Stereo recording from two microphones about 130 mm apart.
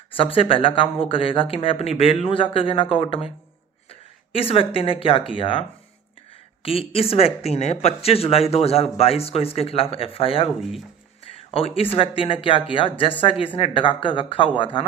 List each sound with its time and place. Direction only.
0.2 s speech: 45° left (ahead or behind)
10.6 s speech: centre (ahead or behind)
11.3 s a sound: 50° left (ahead or behind)
11.9 s speech: 40° left (ahead or behind)